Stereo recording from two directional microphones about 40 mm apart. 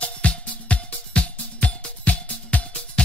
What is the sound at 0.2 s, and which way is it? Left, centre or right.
Music, left.